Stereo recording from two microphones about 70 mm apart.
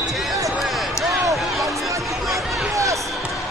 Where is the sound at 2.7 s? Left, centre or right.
Right.